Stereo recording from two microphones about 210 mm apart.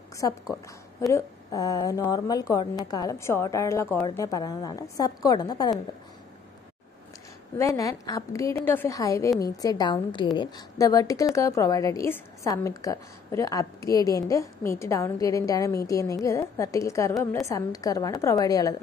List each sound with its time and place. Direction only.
0.2 s a woman's voice: 15° left (ahead or behind)
7.5 s a woman's voice: 15° left (ahead or behind)